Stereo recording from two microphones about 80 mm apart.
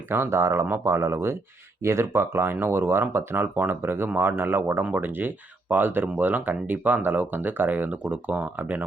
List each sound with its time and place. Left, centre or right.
0.1 s speech: right